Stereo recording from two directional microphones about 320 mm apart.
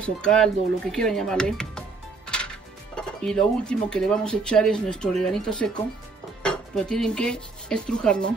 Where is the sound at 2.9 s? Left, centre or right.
Centre.